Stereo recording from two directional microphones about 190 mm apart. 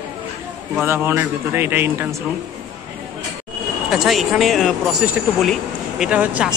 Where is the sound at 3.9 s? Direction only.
Centre (ahead or behind).